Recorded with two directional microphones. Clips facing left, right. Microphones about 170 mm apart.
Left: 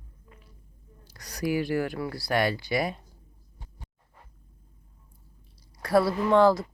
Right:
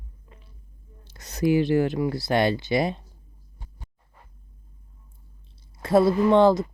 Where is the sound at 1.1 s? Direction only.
25° right (ahead or behind).